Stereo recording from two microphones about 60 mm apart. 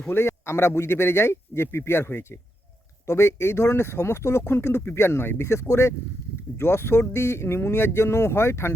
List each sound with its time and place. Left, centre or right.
0.1 s a man's voice: left